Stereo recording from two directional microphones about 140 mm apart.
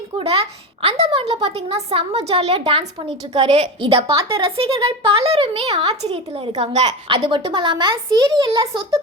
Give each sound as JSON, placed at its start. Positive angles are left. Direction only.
{"t": 0.2, "sound": "a woman's voice", "side_deg": -45}